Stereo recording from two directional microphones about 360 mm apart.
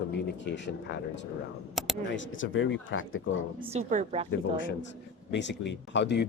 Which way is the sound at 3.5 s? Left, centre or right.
Centre.